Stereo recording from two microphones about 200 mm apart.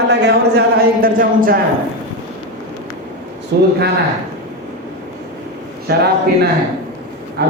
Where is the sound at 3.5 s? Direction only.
50° right (ahead or behind).